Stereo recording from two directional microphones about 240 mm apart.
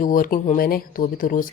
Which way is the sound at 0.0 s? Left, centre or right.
Left.